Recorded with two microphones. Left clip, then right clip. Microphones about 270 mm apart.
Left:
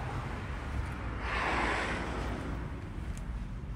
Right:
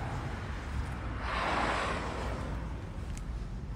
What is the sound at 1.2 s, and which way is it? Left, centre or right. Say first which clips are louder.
Waves: even; right.